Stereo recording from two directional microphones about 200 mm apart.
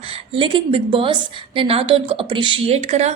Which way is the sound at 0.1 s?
25° right (ahead or behind).